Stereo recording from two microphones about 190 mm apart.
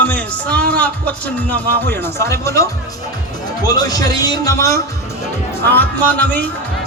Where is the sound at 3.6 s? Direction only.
20° left (ahead or behind).